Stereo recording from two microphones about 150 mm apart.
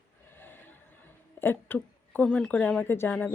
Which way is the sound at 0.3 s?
15° left (ahead or behind).